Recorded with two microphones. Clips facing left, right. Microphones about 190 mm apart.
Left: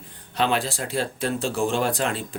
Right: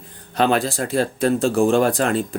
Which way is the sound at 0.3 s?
45° right (ahead or behind).